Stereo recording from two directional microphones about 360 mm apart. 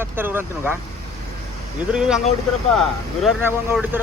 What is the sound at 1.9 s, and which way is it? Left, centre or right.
Speech, centre.